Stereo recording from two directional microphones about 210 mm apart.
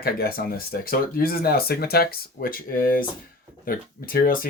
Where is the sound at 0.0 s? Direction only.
45° left (ahead or behind).